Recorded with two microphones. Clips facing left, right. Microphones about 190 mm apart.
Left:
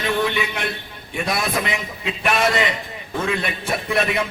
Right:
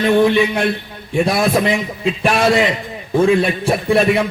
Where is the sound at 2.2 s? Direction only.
30° right (ahead or behind).